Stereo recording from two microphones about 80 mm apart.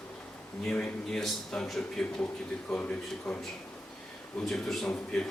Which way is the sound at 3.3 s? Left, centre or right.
Centre.